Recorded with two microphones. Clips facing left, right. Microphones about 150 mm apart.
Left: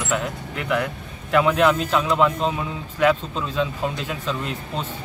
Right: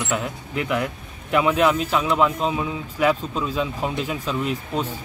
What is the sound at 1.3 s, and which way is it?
Speech, 5° right (ahead or behind).